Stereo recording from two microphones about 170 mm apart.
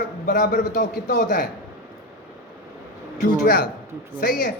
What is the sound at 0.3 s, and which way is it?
Speech, 50° left (ahead or behind).